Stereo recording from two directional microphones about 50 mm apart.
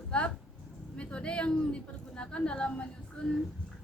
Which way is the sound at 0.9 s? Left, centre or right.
Left.